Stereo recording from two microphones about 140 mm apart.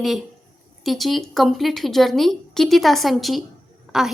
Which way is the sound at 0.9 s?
Centre (ahead or behind).